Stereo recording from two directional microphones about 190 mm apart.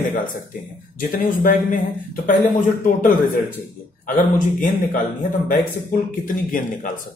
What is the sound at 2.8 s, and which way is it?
Speech, 45° left (ahead or behind).